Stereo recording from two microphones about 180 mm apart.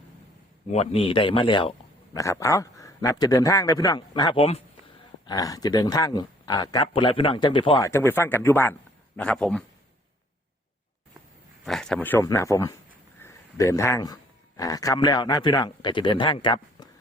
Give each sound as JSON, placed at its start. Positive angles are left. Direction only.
{"t": 0.7, "sound": "a man's voice", "side_deg": 35}
{"t": 2.1, "sound": "a man's voice", "side_deg": 15}
{"t": 5.2, "sound": "a man's voice", "side_deg": 20}
{"t": 6.8, "sound": "a man's voice", "side_deg": 30}
{"t": 7.9, "sound": "speech", "side_deg": 15}
{"t": 11.6, "sound": "a man's voice", "side_deg": 0}